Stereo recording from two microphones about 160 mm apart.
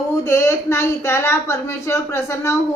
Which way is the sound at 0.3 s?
15° left (ahead or behind).